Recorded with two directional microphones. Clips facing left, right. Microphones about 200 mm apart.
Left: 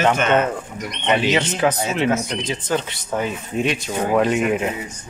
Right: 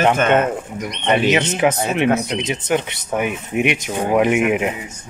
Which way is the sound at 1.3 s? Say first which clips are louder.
Right 2 dB; 20° right (ahead or behind).